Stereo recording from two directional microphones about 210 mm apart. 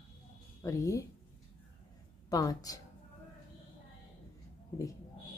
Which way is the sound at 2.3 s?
15° left (ahead or behind).